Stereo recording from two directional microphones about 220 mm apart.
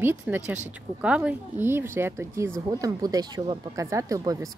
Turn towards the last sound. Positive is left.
turn(degrees=-15)  # may be behind; listen again after turning